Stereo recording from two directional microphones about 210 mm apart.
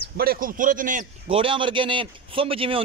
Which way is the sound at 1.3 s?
25° right (ahead or behind).